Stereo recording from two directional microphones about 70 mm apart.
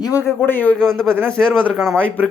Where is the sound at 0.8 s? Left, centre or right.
Centre.